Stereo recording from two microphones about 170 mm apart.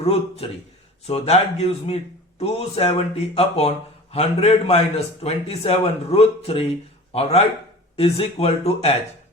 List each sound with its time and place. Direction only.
0.0 s a man's voice: 35° left (ahead or behind)